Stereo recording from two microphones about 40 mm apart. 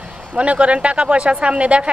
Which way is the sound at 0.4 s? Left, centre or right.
Right.